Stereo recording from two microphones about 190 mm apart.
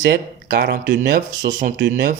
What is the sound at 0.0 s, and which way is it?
A man's voice, 55° right (ahead or behind).